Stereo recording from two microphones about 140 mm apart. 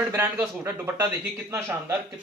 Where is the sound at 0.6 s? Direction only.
15° right (ahead or behind).